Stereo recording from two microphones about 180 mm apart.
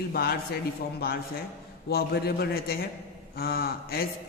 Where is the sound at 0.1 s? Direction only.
60° left (ahead or behind).